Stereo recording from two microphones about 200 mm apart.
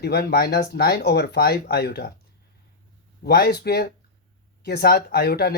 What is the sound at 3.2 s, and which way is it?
Speech, 50° left (ahead or behind).